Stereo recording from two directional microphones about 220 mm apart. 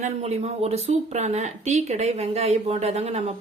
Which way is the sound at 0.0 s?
30° right (ahead or behind).